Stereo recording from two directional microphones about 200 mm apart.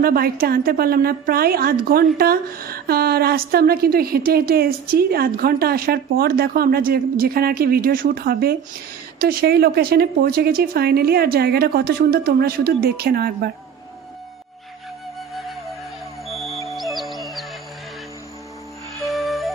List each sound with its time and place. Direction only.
0.0 s a woman's voice: 50° right (ahead or behind)
15.3 s music: centre (ahead or behind)
19.0 s music: centre (ahead or behind)